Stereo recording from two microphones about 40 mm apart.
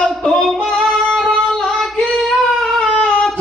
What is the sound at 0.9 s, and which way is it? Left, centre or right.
Music, centre.